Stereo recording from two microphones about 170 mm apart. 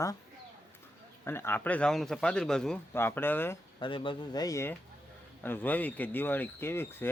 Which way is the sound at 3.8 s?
30° left (ahead or behind).